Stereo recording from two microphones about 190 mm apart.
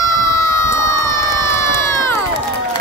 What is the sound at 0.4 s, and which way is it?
Crowd, 15° left (ahead or behind).